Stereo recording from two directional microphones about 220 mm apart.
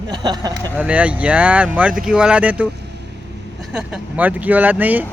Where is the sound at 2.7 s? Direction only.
50° right (ahead or behind).